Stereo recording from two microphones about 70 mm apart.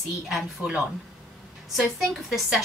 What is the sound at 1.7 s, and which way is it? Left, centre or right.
Speech, centre.